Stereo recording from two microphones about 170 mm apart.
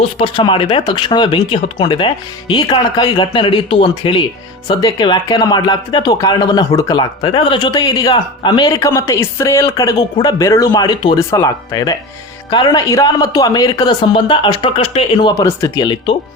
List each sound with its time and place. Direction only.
0.0 s speech: 30° left (ahead or behind)